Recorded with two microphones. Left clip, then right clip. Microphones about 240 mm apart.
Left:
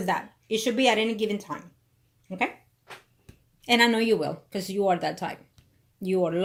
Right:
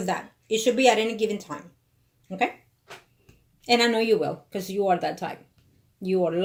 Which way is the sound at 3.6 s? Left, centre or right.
Left.